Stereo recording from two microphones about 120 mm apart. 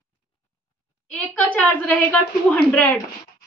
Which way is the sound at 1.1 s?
5° left (ahead or behind).